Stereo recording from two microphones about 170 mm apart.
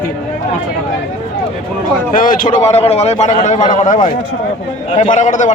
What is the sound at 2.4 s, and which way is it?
A man's voice, 40° left (ahead or behind).